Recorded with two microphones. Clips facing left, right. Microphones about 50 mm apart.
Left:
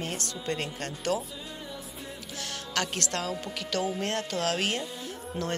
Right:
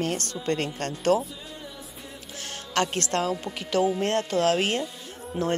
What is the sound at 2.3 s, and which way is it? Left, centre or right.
Speech, right.